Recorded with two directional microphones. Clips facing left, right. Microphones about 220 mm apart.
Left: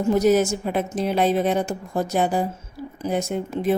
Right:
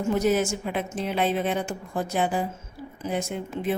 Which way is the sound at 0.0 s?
40° left (ahead or behind).